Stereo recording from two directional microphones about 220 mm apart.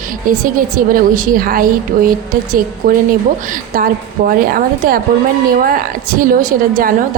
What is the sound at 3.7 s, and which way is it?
A woman's voice, 40° right (ahead or behind).